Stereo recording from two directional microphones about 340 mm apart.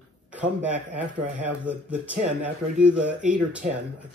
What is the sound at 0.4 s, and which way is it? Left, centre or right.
Speech, centre.